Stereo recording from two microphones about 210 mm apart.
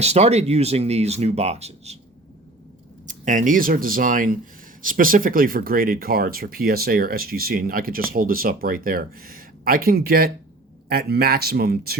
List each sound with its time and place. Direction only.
0.0 s speech: 30° right (ahead or behind)
3.1 s speech: 40° right (ahead or behind)